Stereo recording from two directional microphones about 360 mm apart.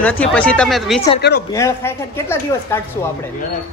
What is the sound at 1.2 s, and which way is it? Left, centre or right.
Speech, left.